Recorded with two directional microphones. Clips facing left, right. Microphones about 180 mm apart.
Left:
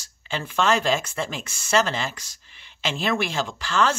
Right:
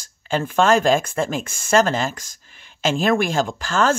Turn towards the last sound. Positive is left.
turn(degrees=-45)  # may be behind; listen again after turning